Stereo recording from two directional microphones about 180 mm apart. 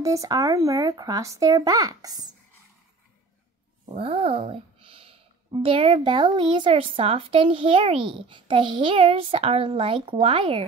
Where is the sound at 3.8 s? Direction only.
30° right (ahead or behind).